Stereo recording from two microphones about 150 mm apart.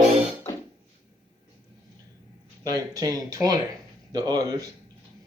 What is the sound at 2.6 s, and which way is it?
Speech, 25° right (ahead or behind).